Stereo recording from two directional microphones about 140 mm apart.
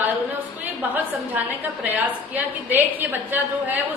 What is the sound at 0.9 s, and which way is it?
A woman's voice, 10° right (ahead or behind).